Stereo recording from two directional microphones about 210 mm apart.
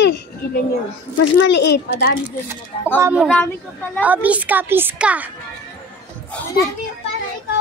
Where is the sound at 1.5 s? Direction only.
55° left (ahead or behind).